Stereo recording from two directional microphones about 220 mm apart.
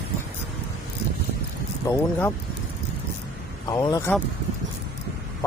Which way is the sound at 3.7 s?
15° left (ahead or behind).